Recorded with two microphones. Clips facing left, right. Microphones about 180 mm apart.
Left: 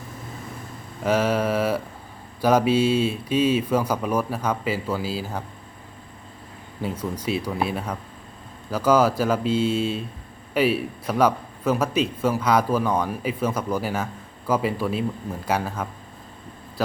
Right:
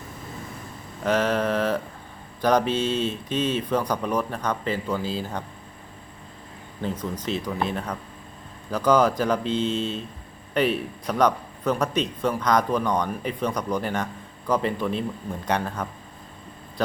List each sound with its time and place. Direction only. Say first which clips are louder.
1.0 s a man's voice: left 1 dB; 10° left (ahead or behind)
6.8 s a man's voice: left 1 dB; 10° left (ahead or behind)